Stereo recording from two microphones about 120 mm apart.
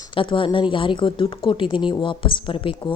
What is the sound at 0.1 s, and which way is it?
A woman's voice, 45° left (ahead or behind).